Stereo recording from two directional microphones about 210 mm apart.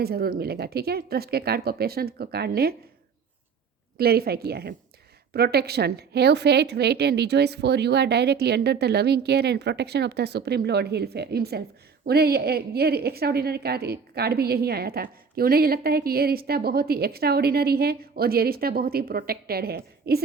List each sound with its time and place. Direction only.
0.0 s a woman's voice: 45° right (ahead or behind)
3.9 s a woman's voice: 45° right (ahead or behind)